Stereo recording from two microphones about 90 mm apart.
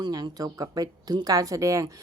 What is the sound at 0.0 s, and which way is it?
Speech, 50° right (ahead or behind).